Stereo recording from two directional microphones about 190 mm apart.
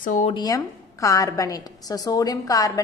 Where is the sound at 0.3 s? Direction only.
20° left (ahead or behind).